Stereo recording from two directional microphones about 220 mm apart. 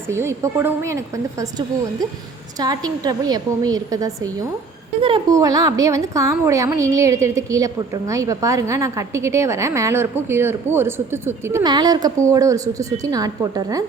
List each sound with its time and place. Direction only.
0.1 s a woman's voice: 10° right (ahead or behind)